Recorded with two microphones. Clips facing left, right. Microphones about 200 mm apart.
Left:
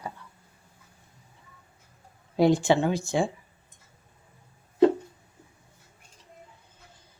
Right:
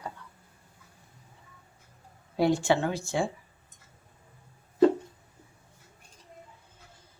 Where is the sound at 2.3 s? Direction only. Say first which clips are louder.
Left 3 dB; 20° left (ahead or behind).